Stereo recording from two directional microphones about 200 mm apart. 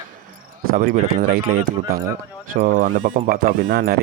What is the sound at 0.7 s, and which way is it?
Speech, 45° right (ahead or behind).